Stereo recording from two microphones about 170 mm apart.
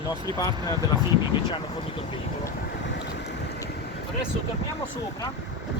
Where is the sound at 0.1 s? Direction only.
25° left (ahead or behind).